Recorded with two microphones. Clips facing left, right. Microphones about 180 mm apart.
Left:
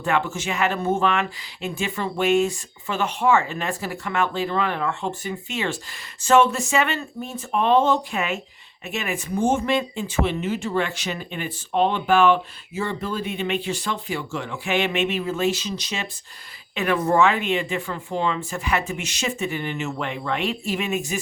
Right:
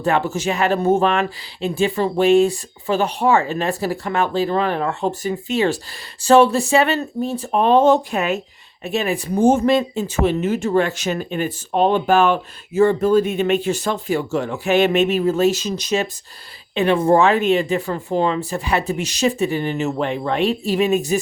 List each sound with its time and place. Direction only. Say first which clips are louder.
0.0 s speech: right 5 dB; 35° right (ahead or behind)
16.7 s speech: right 5 dB; 30° right (ahead or behind)